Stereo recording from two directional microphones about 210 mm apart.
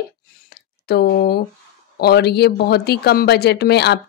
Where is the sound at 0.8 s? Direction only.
50° left (ahead or behind).